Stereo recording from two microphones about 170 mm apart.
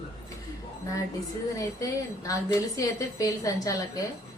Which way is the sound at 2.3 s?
20° left (ahead or behind).